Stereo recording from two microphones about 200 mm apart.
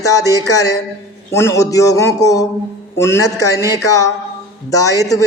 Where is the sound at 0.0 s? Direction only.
15° left (ahead or behind).